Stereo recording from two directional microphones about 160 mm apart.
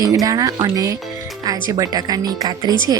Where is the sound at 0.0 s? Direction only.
20° right (ahead or behind).